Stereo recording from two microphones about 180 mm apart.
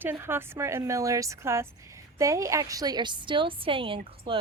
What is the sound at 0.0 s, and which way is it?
A woman's voice, 10° right (ahead or behind).